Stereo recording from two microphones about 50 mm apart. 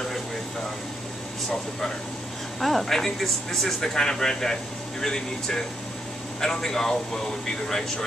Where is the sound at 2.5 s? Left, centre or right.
Centre.